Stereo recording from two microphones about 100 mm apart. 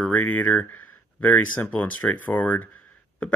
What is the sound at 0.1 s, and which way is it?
Speech, 15° left (ahead or behind).